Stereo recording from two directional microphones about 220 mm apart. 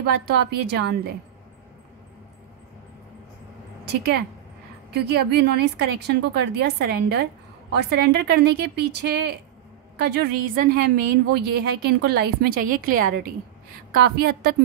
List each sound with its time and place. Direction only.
0.0 s a woman's voice: 45° right (ahead or behind)
3.8 s a woman's voice: 50° right (ahead or behind)